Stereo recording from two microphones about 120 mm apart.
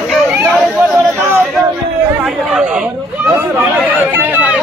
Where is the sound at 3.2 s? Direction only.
15° right (ahead or behind).